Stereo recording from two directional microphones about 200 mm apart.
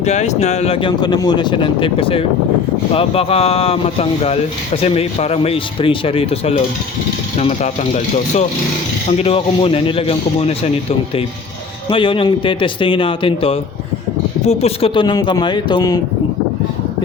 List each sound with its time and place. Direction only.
0.0 s speech: 35° left (ahead or behind)
11.9 s speech: 25° left (ahead or behind)